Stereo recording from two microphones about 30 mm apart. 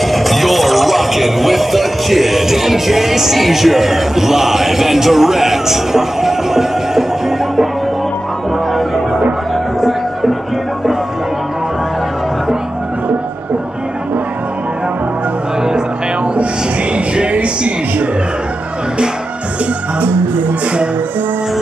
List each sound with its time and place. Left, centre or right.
0.0 s speech: centre
9.8 s music: centre
16.9 s a sound: right